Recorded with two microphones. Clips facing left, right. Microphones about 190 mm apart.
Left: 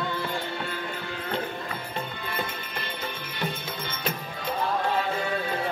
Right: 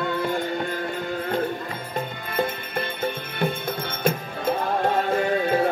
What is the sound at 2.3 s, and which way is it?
Music, 50° right (ahead or behind).